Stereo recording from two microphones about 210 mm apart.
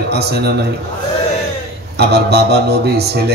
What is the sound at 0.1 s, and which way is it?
Speech, 50° right (ahead or behind).